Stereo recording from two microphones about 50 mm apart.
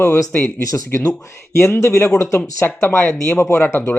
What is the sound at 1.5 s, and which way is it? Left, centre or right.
Speech, left.